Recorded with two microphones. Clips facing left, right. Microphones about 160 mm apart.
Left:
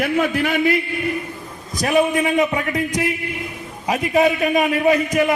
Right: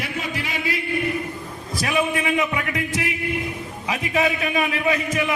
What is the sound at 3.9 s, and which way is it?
A man's voice, 40° left (ahead or behind).